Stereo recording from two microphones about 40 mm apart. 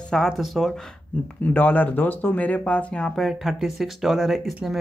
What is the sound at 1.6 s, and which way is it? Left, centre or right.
Speech, left.